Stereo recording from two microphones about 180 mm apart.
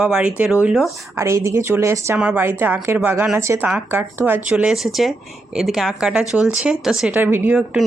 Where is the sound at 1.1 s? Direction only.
15° right (ahead or behind).